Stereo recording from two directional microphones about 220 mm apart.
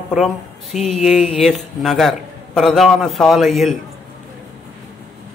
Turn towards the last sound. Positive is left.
turn(degrees=0)  # may be behind; listen again after turning